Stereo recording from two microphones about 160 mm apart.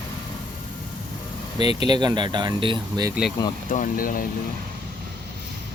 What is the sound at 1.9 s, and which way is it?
Speech, 25° right (ahead or behind).